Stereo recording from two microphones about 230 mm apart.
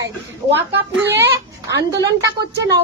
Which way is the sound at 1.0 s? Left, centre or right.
Right.